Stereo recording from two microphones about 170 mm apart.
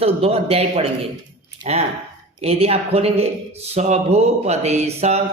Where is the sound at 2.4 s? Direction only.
35° right (ahead or behind).